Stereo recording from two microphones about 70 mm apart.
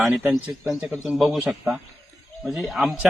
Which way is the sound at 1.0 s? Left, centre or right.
Centre.